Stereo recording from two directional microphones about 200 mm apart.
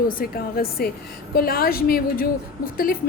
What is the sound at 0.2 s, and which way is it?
A woman's voice, 50° left (ahead or behind).